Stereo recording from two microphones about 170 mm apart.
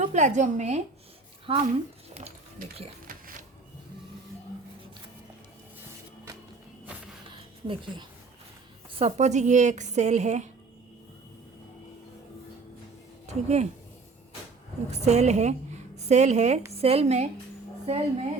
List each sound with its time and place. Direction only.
0.0 s a woman's voice: 45° right (ahead or behind)
1.5 s a woman's voice: 30° right (ahead or behind)
9.0 s a woman's voice: 40° right (ahead or behind)
13.2 s speech: 40° right (ahead or behind)
14.8 s a woman's voice: 40° right (ahead or behind)